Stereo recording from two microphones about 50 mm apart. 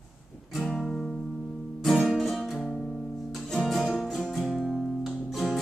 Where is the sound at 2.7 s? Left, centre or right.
Centre.